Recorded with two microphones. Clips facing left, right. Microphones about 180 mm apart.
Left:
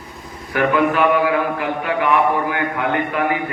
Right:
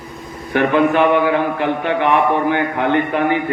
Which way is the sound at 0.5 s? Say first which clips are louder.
Right 3 dB; 25° right (ahead or behind).